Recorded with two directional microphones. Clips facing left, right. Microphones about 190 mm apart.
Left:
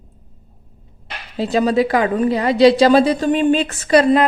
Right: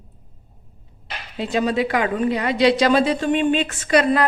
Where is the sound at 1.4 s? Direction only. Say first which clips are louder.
Left 5 dB; 35° left (ahead or behind).